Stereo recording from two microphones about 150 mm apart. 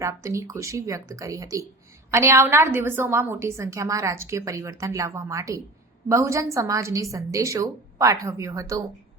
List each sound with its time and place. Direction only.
0.0 s a woman's voice: 20° right (ahead or behind)